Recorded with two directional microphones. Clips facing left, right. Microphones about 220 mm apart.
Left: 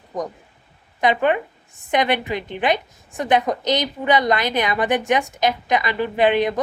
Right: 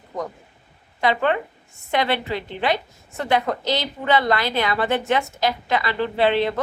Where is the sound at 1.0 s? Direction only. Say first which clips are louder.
Left 2 dB; 15° left (ahead or behind).